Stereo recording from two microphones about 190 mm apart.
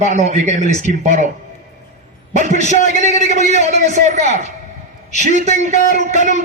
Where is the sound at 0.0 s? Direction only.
40° right (ahead or behind).